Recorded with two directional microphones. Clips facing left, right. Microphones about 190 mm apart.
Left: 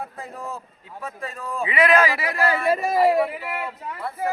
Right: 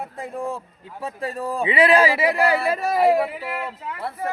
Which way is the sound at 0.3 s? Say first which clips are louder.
Right 7 dB; 30° right (ahead or behind).